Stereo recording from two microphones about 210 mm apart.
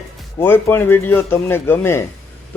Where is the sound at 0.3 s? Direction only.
10° left (ahead or behind).